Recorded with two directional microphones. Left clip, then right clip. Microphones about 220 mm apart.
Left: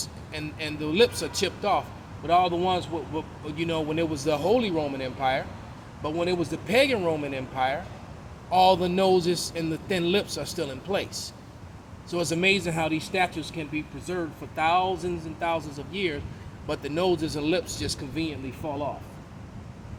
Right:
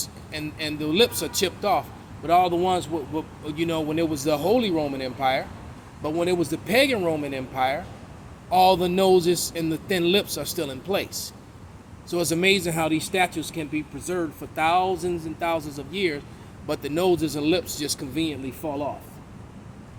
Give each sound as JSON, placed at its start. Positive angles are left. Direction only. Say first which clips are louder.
{"t": 0.3, "sound": "speech", "louder": "right 4 dB", "side_deg": -25}